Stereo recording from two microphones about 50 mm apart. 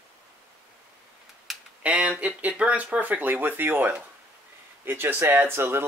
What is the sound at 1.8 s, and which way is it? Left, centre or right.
Speech, right.